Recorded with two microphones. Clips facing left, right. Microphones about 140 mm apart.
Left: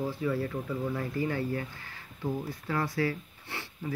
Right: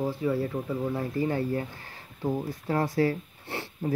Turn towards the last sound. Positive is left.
turn(degrees=-40)  # may be behind; listen again after turning